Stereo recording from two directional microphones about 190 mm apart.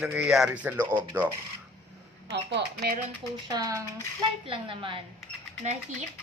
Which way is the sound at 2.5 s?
65° right (ahead or behind).